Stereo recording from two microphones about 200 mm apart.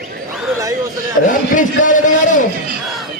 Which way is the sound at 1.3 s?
40° left (ahead or behind).